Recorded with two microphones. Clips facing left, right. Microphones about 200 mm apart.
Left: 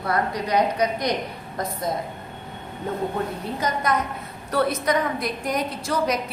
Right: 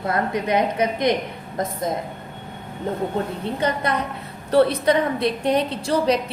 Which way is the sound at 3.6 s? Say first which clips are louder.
Right 1 dB; 30° right (ahead or behind).